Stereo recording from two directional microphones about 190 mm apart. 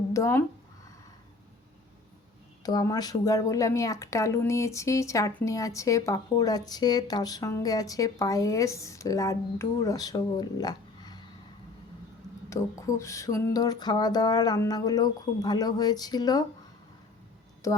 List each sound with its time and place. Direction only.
0.1 s speech: 15° left (ahead or behind)
2.6 s speech: 20° left (ahead or behind)
12.5 s a sound: 15° left (ahead or behind)
17.6 s speech: 15° left (ahead or behind)